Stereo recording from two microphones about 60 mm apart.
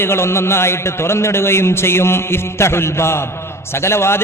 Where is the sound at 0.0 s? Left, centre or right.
Left.